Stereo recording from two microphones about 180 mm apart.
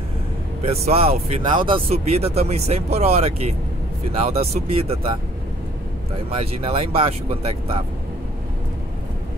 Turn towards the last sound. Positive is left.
turn(degrees=-30)  # may be behind; listen again after turning